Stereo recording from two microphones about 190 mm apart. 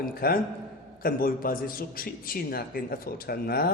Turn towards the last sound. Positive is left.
turn(degrees=50)  # may be behind; listen again after turning